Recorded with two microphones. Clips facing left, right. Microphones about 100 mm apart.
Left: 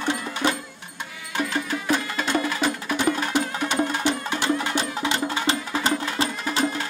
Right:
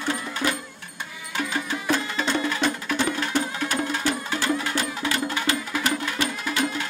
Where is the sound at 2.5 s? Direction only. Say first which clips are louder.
Even; 10° left (ahead or behind).